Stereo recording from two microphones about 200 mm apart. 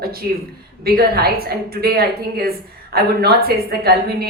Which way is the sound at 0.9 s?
50° right (ahead or behind).